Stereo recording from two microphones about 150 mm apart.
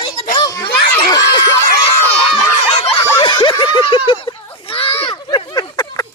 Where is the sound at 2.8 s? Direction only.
30° left (ahead or behind).